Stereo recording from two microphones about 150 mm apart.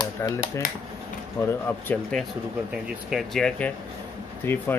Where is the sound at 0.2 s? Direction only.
20° left (ahead or behind).